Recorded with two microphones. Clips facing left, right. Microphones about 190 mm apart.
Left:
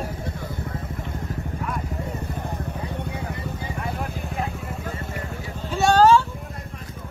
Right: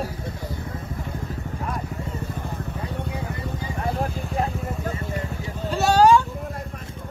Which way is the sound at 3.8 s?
35° right (ahead or behind).